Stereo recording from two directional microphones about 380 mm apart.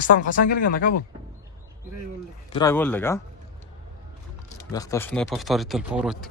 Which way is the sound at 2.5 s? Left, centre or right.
Centre.